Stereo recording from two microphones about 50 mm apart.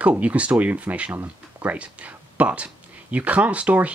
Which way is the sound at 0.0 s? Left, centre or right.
Right.